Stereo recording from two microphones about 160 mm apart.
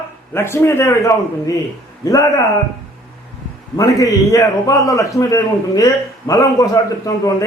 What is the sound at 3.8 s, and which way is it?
A man's voice, 20° left (ahead or behind).